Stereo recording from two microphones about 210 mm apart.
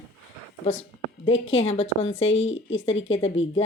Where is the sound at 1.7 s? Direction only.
30° left (ahead or behind).